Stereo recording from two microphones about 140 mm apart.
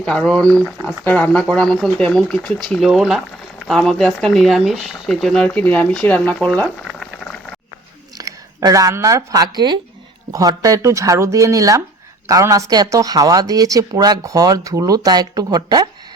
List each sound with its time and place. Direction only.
0.0 s speech: 5° left (ahead or behind)
8.2 s speech: 25° right (ahead or behind)